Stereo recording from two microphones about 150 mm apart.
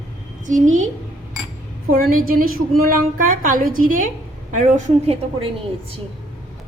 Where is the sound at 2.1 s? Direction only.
70° right (ahead or behind).